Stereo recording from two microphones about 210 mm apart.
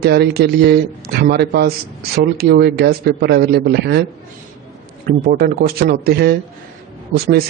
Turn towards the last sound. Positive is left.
turn(degrees=-45)  # may be behind; listen again after turning